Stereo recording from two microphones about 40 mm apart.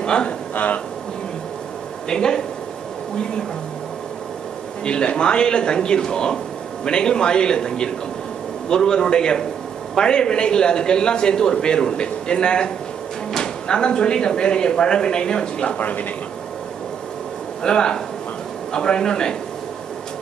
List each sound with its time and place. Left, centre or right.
0.0 s speech: left
2.0 s speech: centre
4.8 s speech: left
15.8 s speech: left
17.6 s speech: centre